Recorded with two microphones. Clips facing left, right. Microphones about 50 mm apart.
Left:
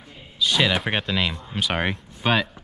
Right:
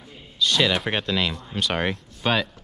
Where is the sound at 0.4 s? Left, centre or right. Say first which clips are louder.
Even; centre.